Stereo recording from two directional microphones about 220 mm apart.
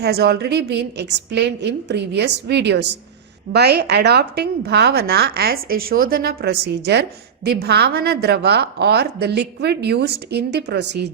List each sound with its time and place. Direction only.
0.0 s a woman's voice: 45° right (ahead or behind)